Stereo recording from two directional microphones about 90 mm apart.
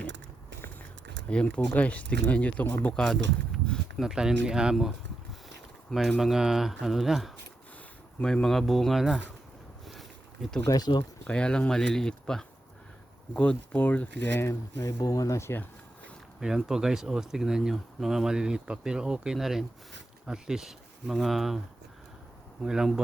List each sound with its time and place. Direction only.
1.3 s speech: 10° left (ahead or behind)
3.0 s a sound: 5° left (ahead or behind)
4.0 s speech: 5° right (ahead or behind)
5.9 s speech: centre (ahead or behind)
8.2 s speech: 10° left (ahead or behind)
9.9 s a sound: centre (ahead or behind)
10.7 s speech: 45° left (ahead or behind)
11.3 s speech: 10° left (ahead or behind)
14.4 s speech: 30° left (ahead or behind)
15.0 s speech: 40° left (ahead or behind)
16.4 s speech: 5° right (ahead or behind)
22.6 s speech: 5° right (ahead or behind)